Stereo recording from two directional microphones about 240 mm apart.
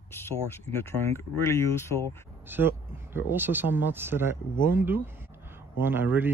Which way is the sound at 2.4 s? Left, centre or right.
Centre.